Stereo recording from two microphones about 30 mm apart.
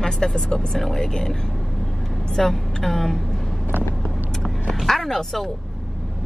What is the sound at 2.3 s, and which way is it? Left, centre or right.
Speech, centre.